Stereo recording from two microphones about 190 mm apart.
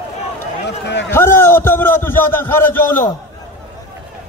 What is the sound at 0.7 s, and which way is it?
Run, 65° left (ahead or behind).